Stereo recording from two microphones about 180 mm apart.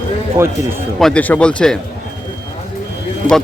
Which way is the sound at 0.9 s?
5° left (ahead or behind).